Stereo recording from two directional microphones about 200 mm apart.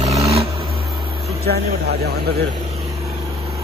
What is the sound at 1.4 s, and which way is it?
Speech, 50° right (ahead or behind).